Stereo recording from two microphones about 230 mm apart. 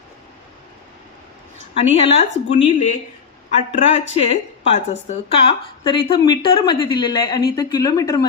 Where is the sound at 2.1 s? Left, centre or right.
Left.